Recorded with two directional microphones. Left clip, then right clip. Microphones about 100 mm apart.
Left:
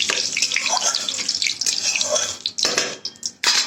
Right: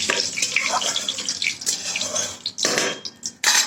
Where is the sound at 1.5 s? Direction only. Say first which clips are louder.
Left 4 dB; 35° right (ahead or behind).